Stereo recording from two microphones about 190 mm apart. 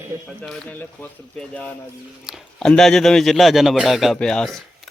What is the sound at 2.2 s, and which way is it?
A man's voice, 5° left (ahead or behind).